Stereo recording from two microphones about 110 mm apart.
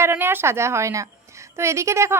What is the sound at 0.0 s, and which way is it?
A woman's voice, 20° right (ahead or behind).